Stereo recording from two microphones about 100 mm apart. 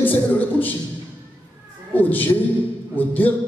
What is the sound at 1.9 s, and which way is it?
A man's voice, 20° left (ahead or behind).